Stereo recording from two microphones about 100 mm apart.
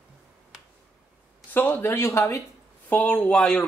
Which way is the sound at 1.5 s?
20° left (ahead or behind).